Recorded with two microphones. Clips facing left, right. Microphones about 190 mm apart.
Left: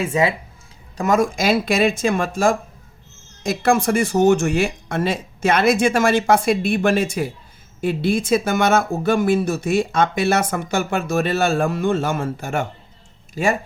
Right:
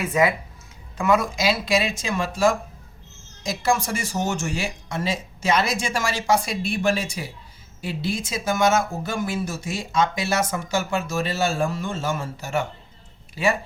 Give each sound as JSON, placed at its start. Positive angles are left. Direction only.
{"t": 0.0, "sound": "speech", "side_deg": 30}
{"t": 0.9, "sound": "speech", "side_deg": 45}